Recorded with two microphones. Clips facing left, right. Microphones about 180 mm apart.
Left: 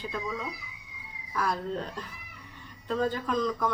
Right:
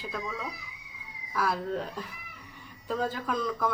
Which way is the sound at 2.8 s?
5° right (ahead or behind).